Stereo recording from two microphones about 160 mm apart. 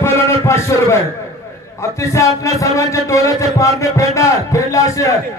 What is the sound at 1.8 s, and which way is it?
A man's voice, 20° left (ahead or behind).